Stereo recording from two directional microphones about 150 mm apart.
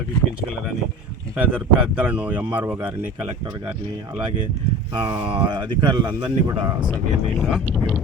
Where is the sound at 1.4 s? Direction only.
10° right (ahead or behind).